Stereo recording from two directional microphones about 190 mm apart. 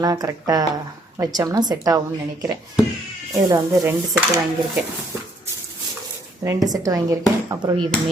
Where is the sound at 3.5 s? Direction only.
15° right (ahead or behind).